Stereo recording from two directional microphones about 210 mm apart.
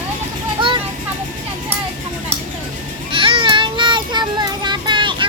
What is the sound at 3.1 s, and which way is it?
Child singing, 25° right (ahead or behind).